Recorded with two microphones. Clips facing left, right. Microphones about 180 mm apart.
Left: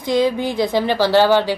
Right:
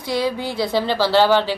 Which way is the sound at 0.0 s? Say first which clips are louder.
Left 5 dB; 20° left (ahead or behind).